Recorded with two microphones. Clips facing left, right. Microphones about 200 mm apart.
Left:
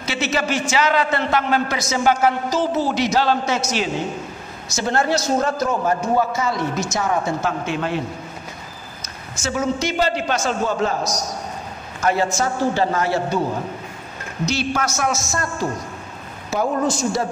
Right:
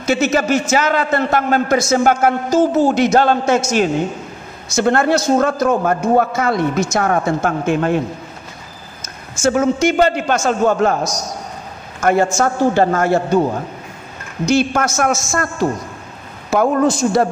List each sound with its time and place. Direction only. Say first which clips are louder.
0.0 s a man's voice: right 7 dB; 45° right (ahead or behind)
9.0 s a man's voice: right 11 dB; 50° right (ahead or behind)
12.0 s a man's voice: right 5 dB; 50° right (ahead or behind)
14.4 s a man's voice: right 7 dB; 50° right (ahead or behind)
16.4 s a man's voice: right 6 dB; 55° right (ahead or behind)